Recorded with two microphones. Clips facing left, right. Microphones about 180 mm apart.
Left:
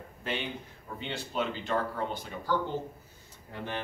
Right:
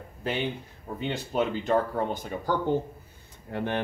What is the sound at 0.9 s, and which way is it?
Speech, 45° right (ahead or behind).